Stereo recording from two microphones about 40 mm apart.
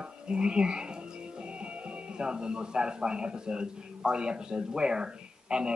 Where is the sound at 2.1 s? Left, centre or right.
Right.